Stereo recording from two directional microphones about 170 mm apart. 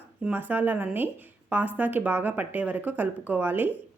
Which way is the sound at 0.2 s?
10° right (ahead or behind).